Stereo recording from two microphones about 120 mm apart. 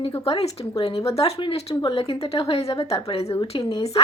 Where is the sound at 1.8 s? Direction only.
45° left (ahead or behind).